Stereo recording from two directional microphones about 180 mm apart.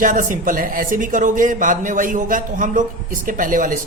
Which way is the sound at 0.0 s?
45° right (ahead or behind).